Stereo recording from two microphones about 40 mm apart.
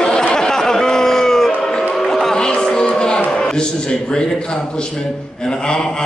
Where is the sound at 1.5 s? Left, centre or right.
Centre.